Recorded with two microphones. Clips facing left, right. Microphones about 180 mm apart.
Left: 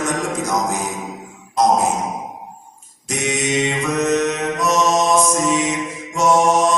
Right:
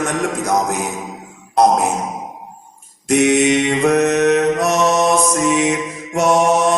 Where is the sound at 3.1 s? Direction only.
65° right (ahead or behind).